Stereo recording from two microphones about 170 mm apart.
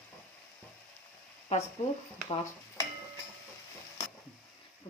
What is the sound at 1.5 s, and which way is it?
Speech, 45° left (ahead or behind).